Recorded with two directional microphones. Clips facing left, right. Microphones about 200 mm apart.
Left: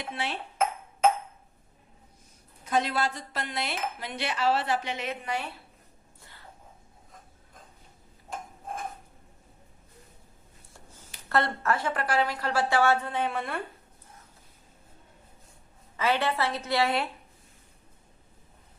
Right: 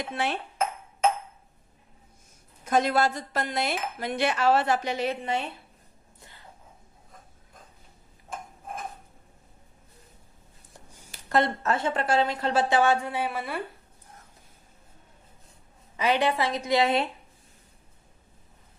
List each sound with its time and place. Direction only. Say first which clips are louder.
0.1 s speech: right 3 dB; 50° right (ahead or behind)
2.6 s speech: right 4 dB; 45° right (ahead or behind); by 5.5 s 25° right (ahead or behind)
6.1 s a sound: right 2 dB; 20° right (ahead or behind)
10.9 s speech: right 3 dB; 15° right (ahead or behind)
16.0 s a woman's voice: right 2 dB; 15° right (ahead or behind)